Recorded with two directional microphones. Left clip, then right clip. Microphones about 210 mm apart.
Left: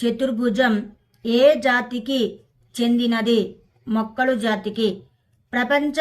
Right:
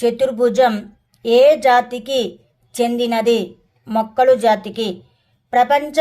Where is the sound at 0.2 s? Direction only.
30° right (ahead or behind).